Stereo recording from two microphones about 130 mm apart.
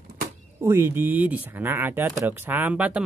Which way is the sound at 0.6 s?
20° right (ahead or behind).